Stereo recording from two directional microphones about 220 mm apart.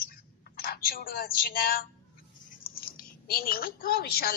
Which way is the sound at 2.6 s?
45° left (ahead or behind).